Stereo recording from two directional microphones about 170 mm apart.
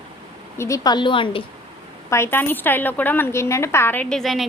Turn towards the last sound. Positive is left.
turn(degrees=0)  # may be behind; listen again after turning